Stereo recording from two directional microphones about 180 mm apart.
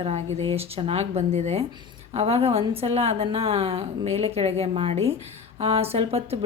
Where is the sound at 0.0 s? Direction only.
35° right (ahead or behind).